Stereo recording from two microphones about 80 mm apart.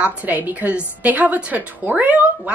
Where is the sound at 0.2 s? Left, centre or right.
Right.